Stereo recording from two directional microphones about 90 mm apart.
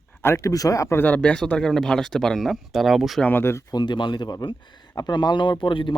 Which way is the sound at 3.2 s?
25° left (ahead or behind).